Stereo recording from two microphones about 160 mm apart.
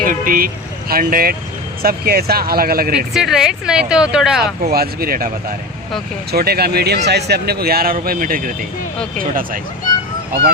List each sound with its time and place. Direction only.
0.0 s speech: 60° right (ahead or behind)
3.1 s speech: 5° right (ahead or behind)
4.7 s speech: 70° right (ahead or behind)
6.3 s speech: 75° right (ahead or behind); by 8.5 s 60° right (ahead or behind)